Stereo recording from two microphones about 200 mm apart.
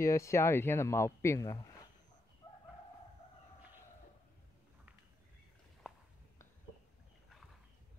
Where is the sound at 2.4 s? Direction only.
25° left (ahead or behind).